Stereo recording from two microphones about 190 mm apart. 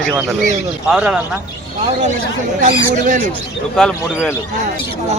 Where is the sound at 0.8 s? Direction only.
5° right (ahead or behind).